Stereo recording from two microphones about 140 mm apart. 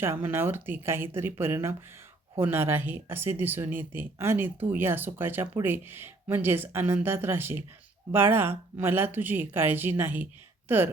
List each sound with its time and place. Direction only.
0.0 s speech: 15° right (ahead or behind)